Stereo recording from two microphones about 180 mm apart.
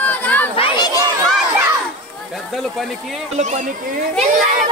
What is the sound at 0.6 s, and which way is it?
Chatter, 25° left (ahead or behind).